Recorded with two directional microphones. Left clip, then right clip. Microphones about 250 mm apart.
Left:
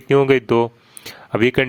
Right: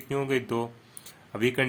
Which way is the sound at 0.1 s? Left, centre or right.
Left.